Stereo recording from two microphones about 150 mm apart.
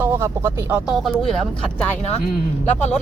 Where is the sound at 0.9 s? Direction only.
Centre (ahead or behind).